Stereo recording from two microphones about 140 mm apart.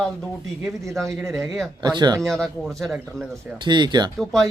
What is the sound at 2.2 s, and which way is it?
Speech, 5° left (ahead or behind).